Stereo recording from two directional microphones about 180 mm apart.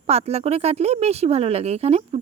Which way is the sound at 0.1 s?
35° right (ahead or behind).